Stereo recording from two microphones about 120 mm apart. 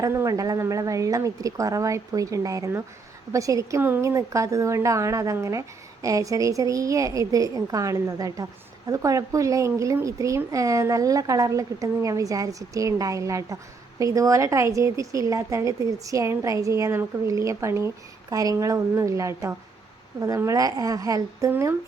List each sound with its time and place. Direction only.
0.0 s a woman's voice: 25° right (ahead or behind)